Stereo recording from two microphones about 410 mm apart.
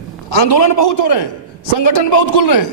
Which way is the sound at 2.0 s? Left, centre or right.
Left.